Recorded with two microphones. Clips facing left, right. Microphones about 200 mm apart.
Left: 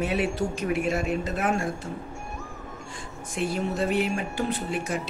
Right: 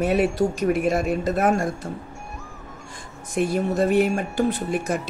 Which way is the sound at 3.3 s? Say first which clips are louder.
Right 5 dB; 45° right (ahead or behind).